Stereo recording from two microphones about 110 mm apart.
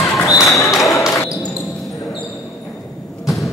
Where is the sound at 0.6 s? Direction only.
Centre (ahead or behind).